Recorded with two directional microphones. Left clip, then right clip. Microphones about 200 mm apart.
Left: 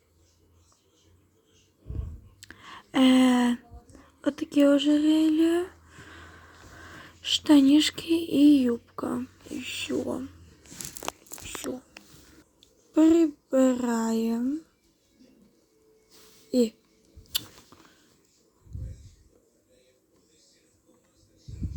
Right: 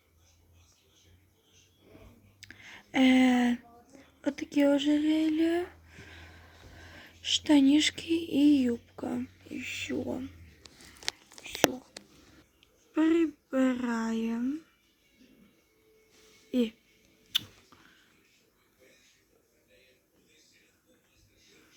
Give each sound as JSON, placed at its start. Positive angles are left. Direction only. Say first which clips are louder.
{"t": 2.4, "sound": "a sound", "louder": "left 3 dB", "side_deg": 10}
{"t": 7.3, "sound": "speech", "louder": "left 4 dB", "side_deg": 50}
{"t": 8.6, "sound": "speech", "louder": "left 4 dB", "side_deg": 5}
{"t": 12.5, "sound": "speech", "louder": "left 7 dB", "side_deg": 15}
{"t": 16.5, "sound": "speech", "louder": "left 6 dB", "side_deg": 10}